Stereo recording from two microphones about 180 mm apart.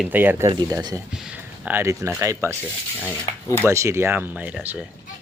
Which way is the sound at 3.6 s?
15° right (ahead or behind).